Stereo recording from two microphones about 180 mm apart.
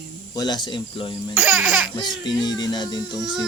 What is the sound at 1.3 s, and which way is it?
Speech, 5° right (ahead or behind).